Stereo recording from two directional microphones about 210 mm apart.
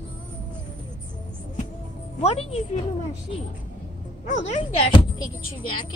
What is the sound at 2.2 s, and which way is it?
Speech, 30° left (ahead or behind).